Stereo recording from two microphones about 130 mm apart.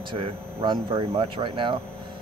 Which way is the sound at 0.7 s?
45° right (ahead or behind).